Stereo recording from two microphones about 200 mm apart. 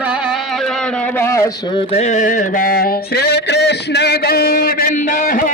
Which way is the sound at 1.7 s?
30° left (ahead or behind).